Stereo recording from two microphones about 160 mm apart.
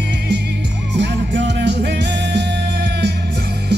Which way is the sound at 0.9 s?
90° right.